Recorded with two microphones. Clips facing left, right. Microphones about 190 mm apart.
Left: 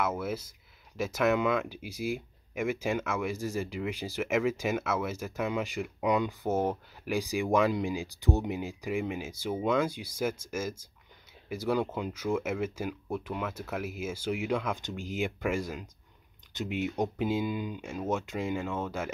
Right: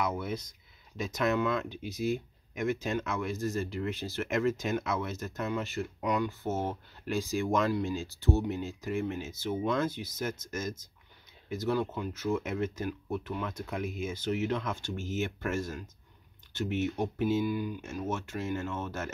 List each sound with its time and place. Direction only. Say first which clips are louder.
0.0 s speech: left 1 dB; 5° left (ahead or behind)